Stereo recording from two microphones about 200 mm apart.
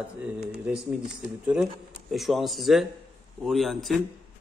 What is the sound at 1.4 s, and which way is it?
Speech, 5° right (ahead or behind).